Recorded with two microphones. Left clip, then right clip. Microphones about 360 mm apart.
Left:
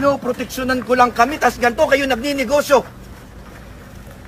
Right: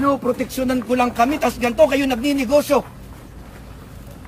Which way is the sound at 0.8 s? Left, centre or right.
Centre.